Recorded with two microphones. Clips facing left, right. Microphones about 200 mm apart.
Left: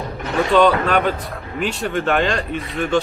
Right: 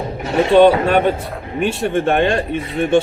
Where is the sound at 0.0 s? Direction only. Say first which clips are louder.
Right 4 dB; 25° right (ahead or behind).